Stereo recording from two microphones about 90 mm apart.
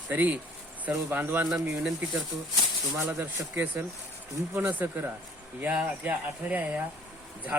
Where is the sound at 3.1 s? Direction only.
25° right (ahead or behind).